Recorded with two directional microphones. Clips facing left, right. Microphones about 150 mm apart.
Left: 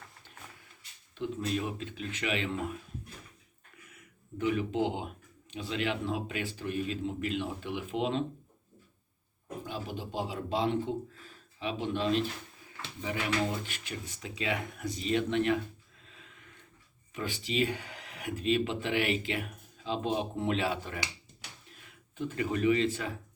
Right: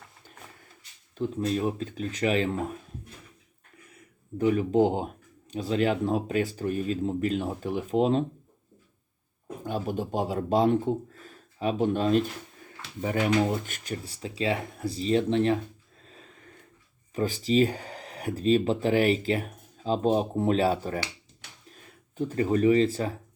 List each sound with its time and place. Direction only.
1.1 s speech: 40° right (ahead or behind)
3.8 s speech: 35° right (ahead or behind)
9.6 s speech: 50° right (ahead or behind)
16.0 s a sound: 40° right (ahead or behind)
17.2 s speech: 35° right (ahead or behind)